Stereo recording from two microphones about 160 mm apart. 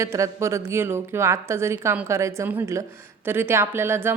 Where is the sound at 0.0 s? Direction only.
20° right (ahead or behind).